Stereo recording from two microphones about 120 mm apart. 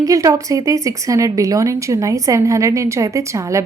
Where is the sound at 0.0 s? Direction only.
30° right (ahead or behind).